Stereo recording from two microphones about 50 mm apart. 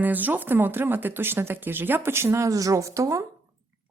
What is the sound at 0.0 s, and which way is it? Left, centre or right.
Speech, right.